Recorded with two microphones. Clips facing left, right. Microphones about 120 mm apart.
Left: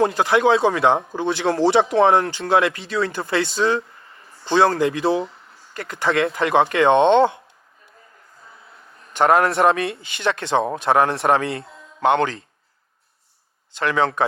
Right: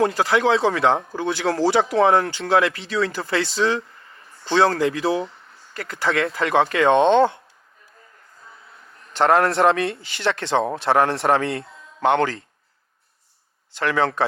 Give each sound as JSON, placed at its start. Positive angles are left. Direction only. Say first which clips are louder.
{"t": 0.0, "sound": "speech", "louder": "left 2 dB", "side_deg": 25}
{"t": 9.1, "sound": "speech", "louder": "left 1 dB", "side_deg": 10}
{"t": 13.7, "sound": "speech", "louder": "left 1 dB", "side_deg": 20}